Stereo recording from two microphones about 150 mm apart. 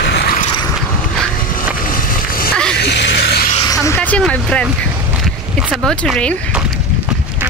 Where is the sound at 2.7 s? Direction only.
90° left.